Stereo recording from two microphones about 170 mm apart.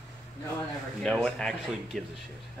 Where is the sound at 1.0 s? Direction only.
5° left (ahead or behind).